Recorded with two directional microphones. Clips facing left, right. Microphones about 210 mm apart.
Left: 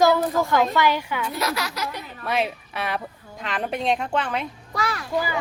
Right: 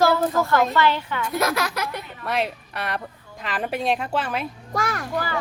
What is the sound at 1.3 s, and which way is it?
Speech, 50° right (ahead or behind).